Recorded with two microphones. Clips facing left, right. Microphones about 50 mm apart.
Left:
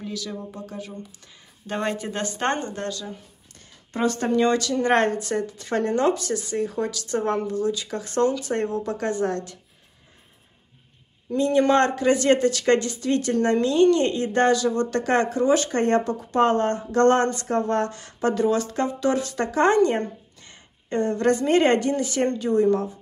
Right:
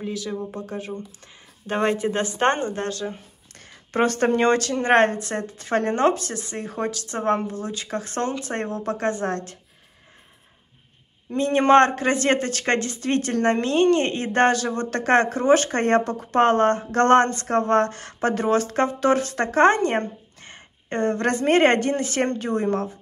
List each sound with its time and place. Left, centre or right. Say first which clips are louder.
0.0 s speech: right 4 dB; right
0.5 s speech: right 4 dB; right
2.9 s a sound: right 4 dB; right
3.6 s a woman's voice: right 3 dB; right
11.3 s speech: right 3 dB; right